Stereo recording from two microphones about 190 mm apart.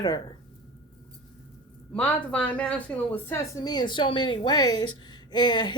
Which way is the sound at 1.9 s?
5° left (ahead or behind).